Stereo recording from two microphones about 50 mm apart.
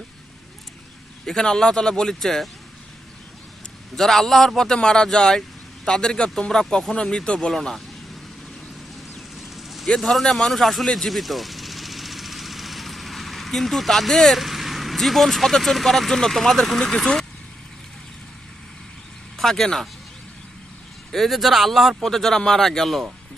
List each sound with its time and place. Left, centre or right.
1.2 s speech: centre
3.9 s speech: centre
7.5 s speech: centre
9.4 s a sound: centre
9.8 s speech: centre
19.3 s speech: centre
21.1 s speech: centre